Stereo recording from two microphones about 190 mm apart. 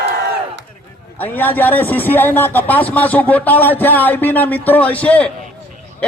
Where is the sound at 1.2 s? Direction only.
10° left (ahead or behind).